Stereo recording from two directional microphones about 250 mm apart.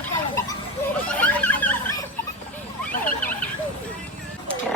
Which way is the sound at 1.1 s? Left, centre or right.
Centre.